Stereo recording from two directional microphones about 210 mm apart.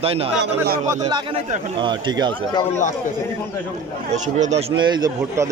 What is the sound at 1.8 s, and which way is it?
Speech, 20° right (ahead or behind).